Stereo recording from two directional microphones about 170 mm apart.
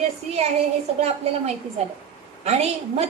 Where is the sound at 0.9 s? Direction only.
40° right (ahead or behind).